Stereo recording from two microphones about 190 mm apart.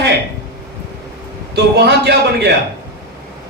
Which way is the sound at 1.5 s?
60° right (ahead or behind).